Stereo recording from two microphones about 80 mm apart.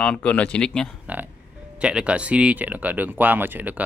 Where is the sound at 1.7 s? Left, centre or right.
Centre.